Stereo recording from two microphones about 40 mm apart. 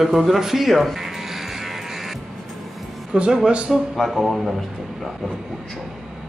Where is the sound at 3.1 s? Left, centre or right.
Right.